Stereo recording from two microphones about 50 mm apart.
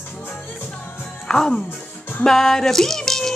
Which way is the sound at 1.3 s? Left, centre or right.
Centre.